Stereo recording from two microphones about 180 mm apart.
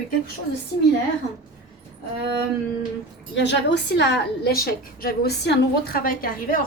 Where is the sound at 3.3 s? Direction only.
75° left (ahead or behind).